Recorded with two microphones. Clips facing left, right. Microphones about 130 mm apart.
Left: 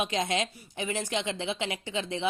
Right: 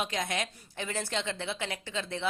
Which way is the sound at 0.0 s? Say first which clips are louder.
Left 4 dB; 20° left (ahead or behind).